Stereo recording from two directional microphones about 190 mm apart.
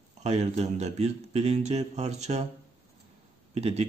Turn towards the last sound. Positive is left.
turn(degrees=-35)  # may be behind; listen again after turning